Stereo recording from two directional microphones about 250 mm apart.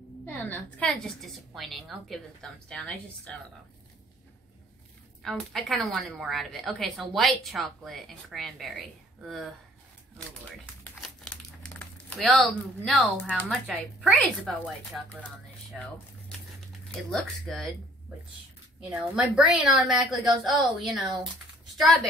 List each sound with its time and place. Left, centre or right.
0.3 s a woman's voice: centre
5.2 s a woman's voice: centre
10.8 s speech: centre
15.7 s a woman's voice: centre
17.1 s a woman's voice: centre
18.8 s a woman's voice: centre